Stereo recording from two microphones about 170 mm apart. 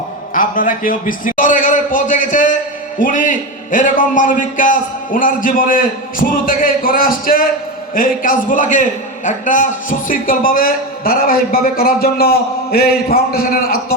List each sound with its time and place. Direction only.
0.3 s a man's voice: 55° left (ahead or behind)